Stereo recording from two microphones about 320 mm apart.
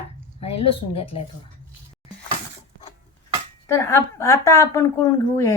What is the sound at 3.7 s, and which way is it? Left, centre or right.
A woman's voice, centre.